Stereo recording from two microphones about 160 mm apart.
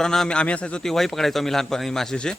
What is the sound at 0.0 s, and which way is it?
A man's voice, 5° left (ahead or behind).